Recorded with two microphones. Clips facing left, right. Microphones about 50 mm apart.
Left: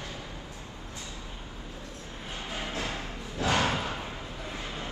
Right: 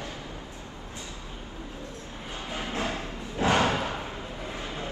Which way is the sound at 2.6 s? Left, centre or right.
Right.